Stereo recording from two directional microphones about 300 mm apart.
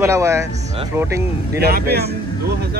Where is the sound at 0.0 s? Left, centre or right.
Centre.